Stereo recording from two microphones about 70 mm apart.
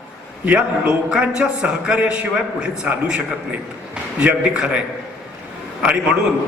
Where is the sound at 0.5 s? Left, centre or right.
Centre.